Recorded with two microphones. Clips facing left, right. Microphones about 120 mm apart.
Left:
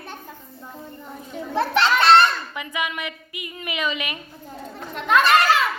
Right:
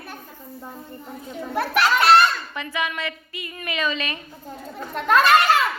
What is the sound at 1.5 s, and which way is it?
Speech, 25° left (ahead or behind).